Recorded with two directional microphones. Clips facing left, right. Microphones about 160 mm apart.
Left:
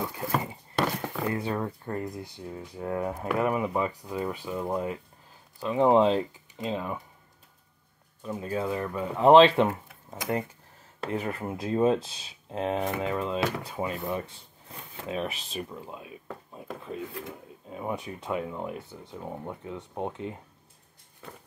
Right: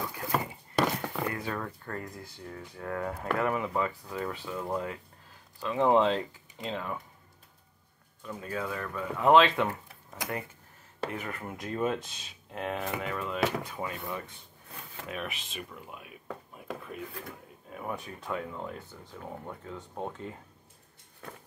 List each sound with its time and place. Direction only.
0.0 s a sound: 20° left (ahead or behind)
1.3 s speech: 25° left (ahead or behind)
8.2 s speech: 25° left (ahead or behind)
11.1 s speech: 30° left (ahead or behind)
16.5 s a sound: 25° left (ahead or behind)
17.6 s speech: 20° left (ahead or behind)